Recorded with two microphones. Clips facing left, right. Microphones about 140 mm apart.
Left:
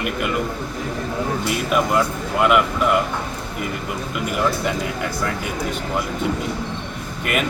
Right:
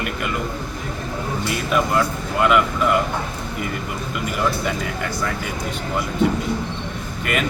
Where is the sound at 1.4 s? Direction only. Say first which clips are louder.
Even; 5° left (ahead or behind).